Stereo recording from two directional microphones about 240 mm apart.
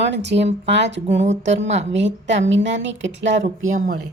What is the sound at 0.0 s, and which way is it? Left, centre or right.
A woman's voice, right.